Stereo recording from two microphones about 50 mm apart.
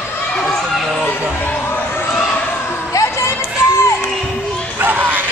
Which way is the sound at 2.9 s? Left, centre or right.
Left.